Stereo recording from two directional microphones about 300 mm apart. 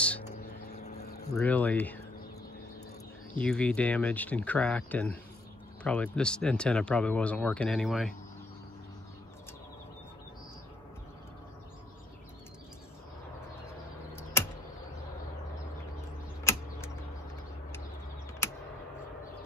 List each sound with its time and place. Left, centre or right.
0.7 s vehicle: left
1.3 s speech: centre
3.3 s speech: centre
16.5 s a sound: centre